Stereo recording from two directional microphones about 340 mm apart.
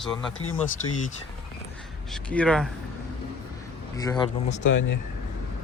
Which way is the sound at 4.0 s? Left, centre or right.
Centre.